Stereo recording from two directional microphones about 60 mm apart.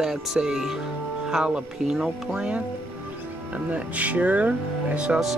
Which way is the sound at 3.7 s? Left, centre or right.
Right.